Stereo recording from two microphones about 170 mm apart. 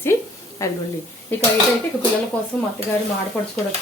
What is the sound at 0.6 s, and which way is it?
Speech, 15° left (ahead or behind).